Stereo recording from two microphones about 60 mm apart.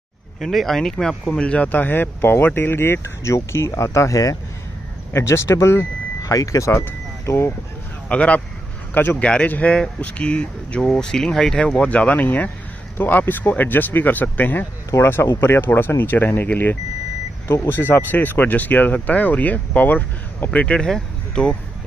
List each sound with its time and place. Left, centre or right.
0.4 s speech: centre
1.7 s speech: left
5.1 s speech: left
6.3 s speech: left
7.2 s speech: left
8.1 s speech: left
8.9 s speech: left
9.2 s speech: centre
11.8 s speech: left
20.6 s speech: centre